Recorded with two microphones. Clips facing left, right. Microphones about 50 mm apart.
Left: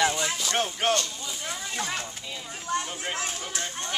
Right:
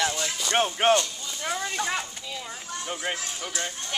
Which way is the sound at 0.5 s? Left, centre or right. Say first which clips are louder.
Right 6 dB; right.